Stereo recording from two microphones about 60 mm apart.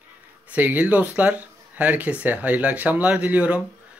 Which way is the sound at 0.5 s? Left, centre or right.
Right.